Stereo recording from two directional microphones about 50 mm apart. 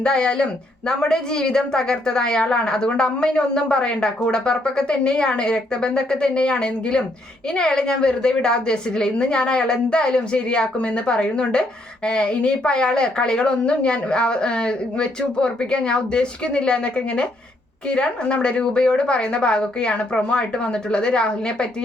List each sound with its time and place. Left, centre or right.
0.0 s speech: centre